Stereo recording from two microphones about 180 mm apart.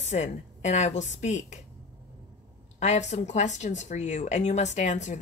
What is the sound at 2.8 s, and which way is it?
Speech, 40° left (ahead or behind).